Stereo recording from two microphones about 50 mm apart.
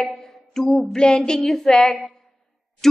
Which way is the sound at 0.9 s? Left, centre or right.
Centre.